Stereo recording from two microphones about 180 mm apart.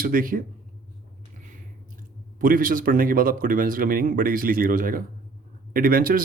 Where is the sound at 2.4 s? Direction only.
50° right (ahead or behind).